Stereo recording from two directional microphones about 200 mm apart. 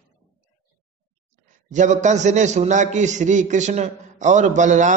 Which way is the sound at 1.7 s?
35° right (ahead or behind).